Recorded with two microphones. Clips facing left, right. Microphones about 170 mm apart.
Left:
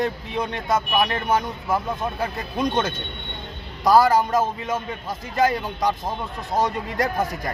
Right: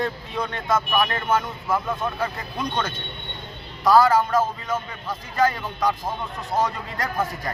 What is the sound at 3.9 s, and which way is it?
Speech, 20° left (ahead or behind).